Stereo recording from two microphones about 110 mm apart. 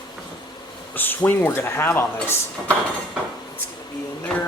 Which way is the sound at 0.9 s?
15° left (ahead or behind).